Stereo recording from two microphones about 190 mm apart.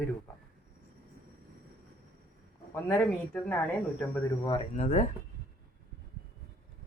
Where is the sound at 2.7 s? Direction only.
10° left (ahead or behind).